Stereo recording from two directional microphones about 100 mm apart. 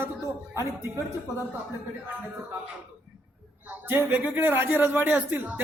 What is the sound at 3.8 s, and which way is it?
Speech, 20° right (ahead or behind).